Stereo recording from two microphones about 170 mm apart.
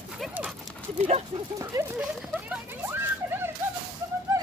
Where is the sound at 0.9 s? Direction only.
35° right (ahead or behind).